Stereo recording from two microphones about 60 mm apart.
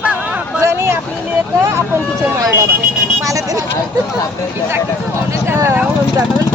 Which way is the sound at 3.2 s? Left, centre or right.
Right.